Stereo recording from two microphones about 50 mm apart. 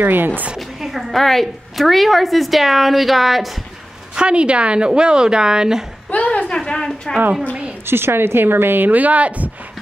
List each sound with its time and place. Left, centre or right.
0.0 s a woman's voice: right
0.7 s a woman's voice: centre
4.1 s a woman's voice: centre
6.0 s a sound: left
6.5 s a sound: centre
7.8 s speech: right